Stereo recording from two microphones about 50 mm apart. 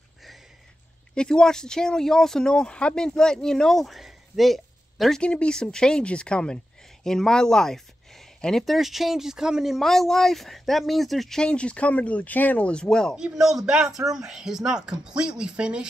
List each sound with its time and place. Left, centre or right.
1.1 s speech: centre
5.2 s speech: left
8.6 s speech: centre
9.8 s speech: centre
11.3 s speech: left
13.1 s speech: centre